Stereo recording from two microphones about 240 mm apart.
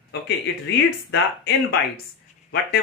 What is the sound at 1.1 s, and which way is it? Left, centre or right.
Speech, left.